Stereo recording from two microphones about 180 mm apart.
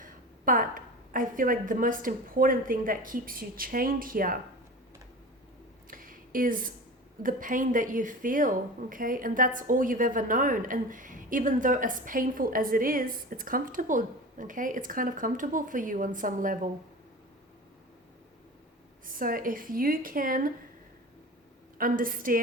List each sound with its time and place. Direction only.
0.0 s a woman's voice: 50° right (ahead or behind)
5.9 s a sound: 50° right (ahead or behind)
7.2 s a woman's voice: 50° right (ahead or behind)
19.0 s a woman's voice: 50° right (ahead or behind)
21.8 s a woman's voice: 50° right (ahead or behind)